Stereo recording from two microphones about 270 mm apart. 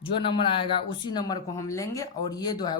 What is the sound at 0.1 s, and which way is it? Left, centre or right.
Speech, centre.